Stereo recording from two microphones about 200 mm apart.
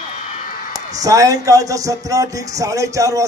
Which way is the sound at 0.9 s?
15° right (ahead or behind).